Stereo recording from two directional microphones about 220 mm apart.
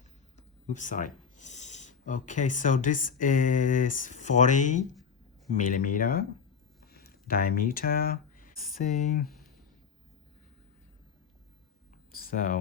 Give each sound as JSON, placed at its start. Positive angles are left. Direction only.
{"t": 0.7, "sound": "speech", "side_deg": 35}
{"t": 6.9, "sound": "a sound", "side_deg": 45}
{"t": 8.7, "sound": "speech", "side_deg": 35}
{"t": 12.3, "sound": "speech", "side_deg": 40}